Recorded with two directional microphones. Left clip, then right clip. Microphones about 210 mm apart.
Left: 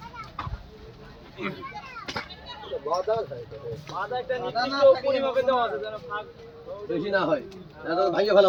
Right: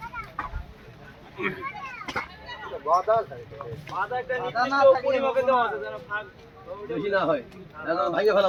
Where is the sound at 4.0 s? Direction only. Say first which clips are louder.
Right 2 dB; 20° right (ahead or behind).